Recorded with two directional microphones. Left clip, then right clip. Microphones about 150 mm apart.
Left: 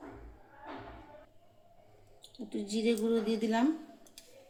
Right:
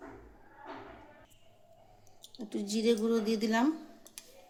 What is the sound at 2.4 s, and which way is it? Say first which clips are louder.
A woman's voice: right 2 dB; 20° right (ahead or behind).